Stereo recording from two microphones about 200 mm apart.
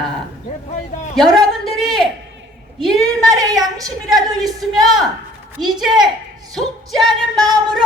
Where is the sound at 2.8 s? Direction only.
Centre (ahead or behind).